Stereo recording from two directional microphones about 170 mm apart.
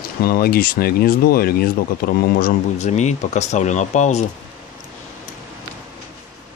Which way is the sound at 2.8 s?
45° left (ahead or behind).